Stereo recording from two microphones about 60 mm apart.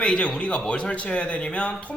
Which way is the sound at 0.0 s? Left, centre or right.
Centre.